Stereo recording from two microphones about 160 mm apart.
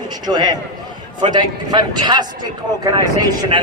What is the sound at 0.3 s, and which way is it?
Speech, 25° right (ahead or behind).